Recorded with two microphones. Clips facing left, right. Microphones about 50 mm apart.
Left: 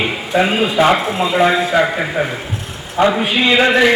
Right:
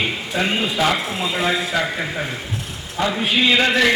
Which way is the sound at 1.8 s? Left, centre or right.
Left.